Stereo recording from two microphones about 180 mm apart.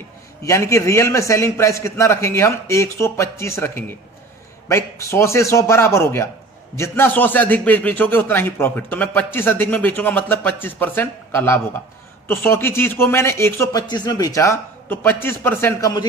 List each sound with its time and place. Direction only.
0.4 s a man's voice: 15° left (ahead or behind)